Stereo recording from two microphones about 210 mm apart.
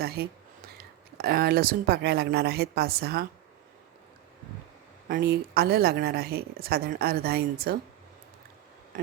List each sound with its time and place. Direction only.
0.2 s a woman's voice: 45° right (ahead or behind)
5.0 s a woman's voice: 45° right (ahead or behind)